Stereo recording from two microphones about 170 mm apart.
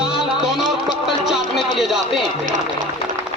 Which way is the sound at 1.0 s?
Centre (ahead or behind).